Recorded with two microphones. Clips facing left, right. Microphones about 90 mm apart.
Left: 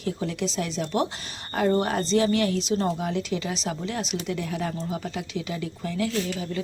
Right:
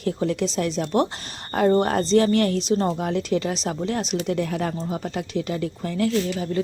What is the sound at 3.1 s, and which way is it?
Speech, 45° right (ahead or behind).